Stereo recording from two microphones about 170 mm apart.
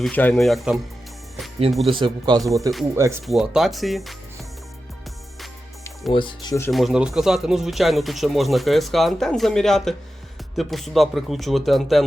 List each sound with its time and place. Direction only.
0.0 s speech: 10° left (ahead or behind)
1.9 s speech: 30° right (ahead or behind)
2.6 s speech: centre (ahead or behind)
2.9 s speech: 15° right (ahead or behind)
3.2 s speech: centre (ahead or behind)
6.1 s speech: 25° left (ahead or behind)
6.7 s speech: centre (ahead or behind)